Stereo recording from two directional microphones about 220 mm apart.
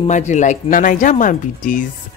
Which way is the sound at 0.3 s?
35° left (ahead or behind).